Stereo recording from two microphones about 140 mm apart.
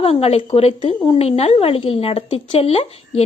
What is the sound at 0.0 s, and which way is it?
Speech, 45° left (ahead or behind).